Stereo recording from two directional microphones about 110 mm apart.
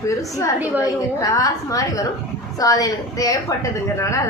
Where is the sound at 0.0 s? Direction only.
30° left (ahead or behind).